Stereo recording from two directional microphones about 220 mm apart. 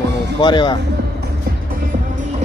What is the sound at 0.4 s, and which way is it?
Speech, 20° left (ahead or behind).